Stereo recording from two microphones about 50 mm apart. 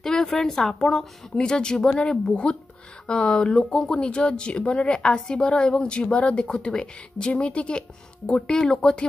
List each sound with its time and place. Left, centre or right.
0.0 s speech: centre